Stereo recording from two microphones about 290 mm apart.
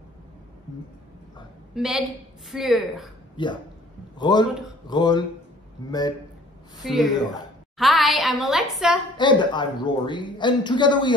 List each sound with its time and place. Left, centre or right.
1.8 s a woman's voice: centre
3.4 s speech: centre
6.8 s a woman's voice: centre
9.1 s speech: centre